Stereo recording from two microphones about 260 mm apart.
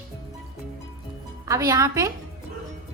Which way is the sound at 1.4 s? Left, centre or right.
Centre.